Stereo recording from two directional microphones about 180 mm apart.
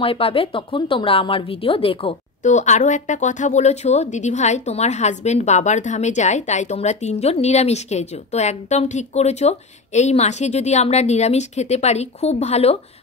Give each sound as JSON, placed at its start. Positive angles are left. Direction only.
{"t": 0.0, "sound": "speech", "side_deg": 30}